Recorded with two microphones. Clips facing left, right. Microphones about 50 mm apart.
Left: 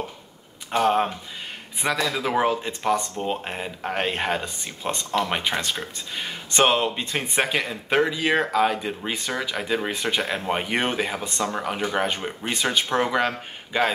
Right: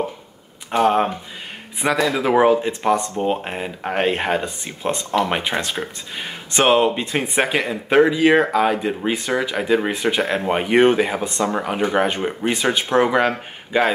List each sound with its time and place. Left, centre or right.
0.7 s speech: centre